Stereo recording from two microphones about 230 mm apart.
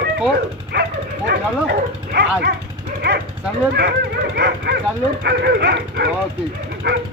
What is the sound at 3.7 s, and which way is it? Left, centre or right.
Speech, right.